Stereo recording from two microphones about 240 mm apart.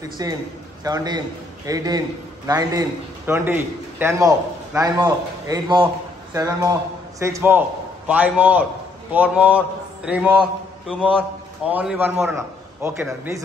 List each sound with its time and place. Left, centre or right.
0.0 s a man's voice: centre